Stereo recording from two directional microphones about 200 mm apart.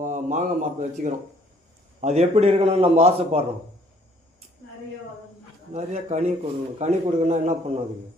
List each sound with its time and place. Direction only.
0.0 s a man's voice: 40° right (ahead or behind)
5.7 s a man's voice: 35° right (ahead or behind)